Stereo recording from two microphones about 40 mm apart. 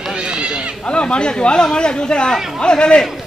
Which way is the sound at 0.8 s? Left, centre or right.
Left.